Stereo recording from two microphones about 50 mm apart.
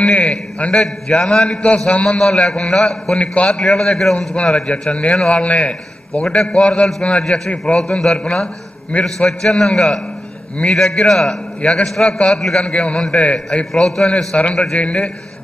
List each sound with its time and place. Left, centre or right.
0.0 s a man's voice: centre
1.1 s a man's voice: centre
4.6 s a man's voice: left
13.7 s a man's voice: centre